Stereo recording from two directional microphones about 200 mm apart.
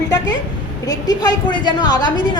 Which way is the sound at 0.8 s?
20° left (ahead or behind).